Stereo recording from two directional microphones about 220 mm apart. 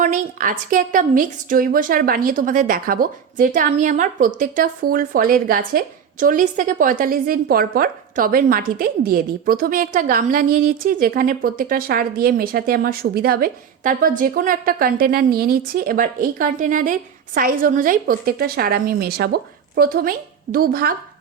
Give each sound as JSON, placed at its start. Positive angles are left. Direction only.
{"t": 0.0, "sound": "a woman's voice", "side_deg": -35}